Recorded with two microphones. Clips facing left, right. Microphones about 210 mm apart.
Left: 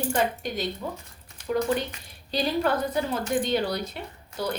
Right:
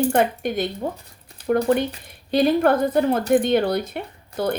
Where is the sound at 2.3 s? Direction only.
55° right (ahead or behind).